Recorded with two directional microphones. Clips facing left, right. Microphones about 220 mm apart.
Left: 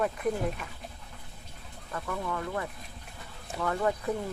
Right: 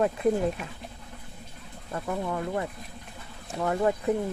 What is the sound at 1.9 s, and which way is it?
Speech, 25° right (ahead or behind).